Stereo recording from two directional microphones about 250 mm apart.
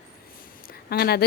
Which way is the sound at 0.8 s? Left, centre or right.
Left.